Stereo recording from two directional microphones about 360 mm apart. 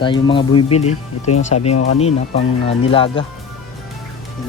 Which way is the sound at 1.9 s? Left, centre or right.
Centre.